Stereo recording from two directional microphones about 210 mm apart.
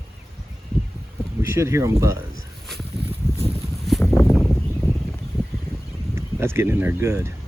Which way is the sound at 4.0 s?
5° left (ahead or behind).